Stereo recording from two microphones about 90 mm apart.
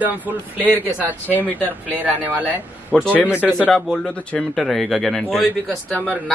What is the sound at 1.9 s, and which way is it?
Speech, 20° right (ahead or behind).